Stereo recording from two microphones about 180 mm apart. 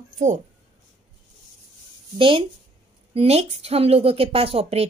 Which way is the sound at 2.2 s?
30° right (ahead or behind).